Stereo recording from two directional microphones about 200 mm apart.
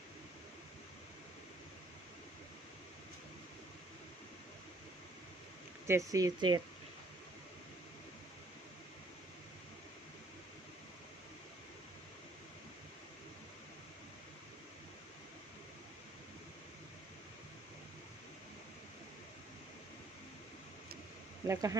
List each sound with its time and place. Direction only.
5.9 s speech: 15° right (ahead or behind)
21.4 s speech: 15° right (ahead or behind)